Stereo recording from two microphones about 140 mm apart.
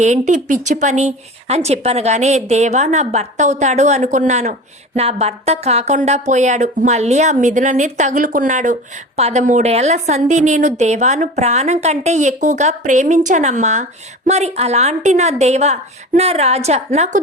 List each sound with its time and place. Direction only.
0.0 s a woman's voice: 60° right (ahead or behind)